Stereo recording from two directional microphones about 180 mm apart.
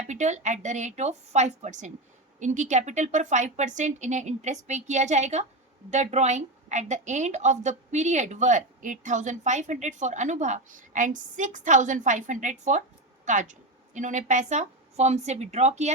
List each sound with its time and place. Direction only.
0.1 s a woman's voice: 40° right (ahead or behind)